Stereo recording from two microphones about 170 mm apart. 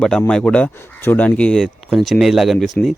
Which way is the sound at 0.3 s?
5° left (ahead or behind).